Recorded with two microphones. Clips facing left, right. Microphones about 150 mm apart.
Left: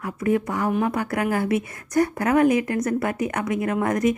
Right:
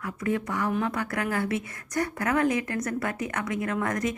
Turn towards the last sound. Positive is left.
turn(degrees=25)  # may be behind; listen again after turning